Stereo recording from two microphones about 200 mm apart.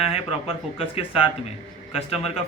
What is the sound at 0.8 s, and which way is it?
Speech, 30° left (ahead or behind).